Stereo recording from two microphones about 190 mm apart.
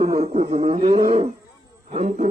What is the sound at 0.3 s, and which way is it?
A man's voice, 35° right (ahead or behind).